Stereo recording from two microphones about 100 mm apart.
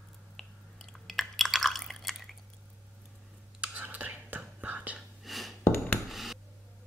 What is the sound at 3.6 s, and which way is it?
Whispering, 15° right (ahead or behind).